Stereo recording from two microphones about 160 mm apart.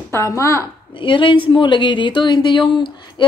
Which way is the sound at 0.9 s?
30° left (ahead or behind).